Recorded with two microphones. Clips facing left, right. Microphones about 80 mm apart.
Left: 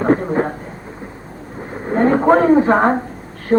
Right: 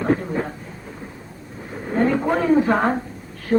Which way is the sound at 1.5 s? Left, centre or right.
Left.